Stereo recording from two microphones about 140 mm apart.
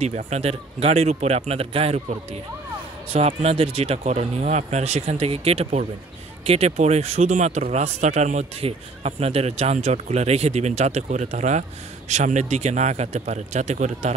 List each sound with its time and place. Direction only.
0.0 s speech: 55° right (ahead or behind)
3.1 s speech: 50° right (ahead or behind)